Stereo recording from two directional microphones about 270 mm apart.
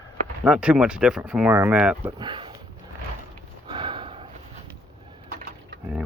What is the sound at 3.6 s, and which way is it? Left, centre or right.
Sniff, centre.